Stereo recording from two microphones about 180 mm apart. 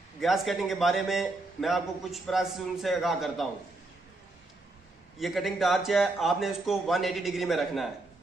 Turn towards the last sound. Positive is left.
turn(degrees=0)  # may be behind; listen again after turning